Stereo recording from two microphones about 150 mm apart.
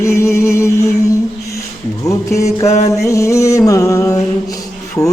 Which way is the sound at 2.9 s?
20° left (ahead or behind).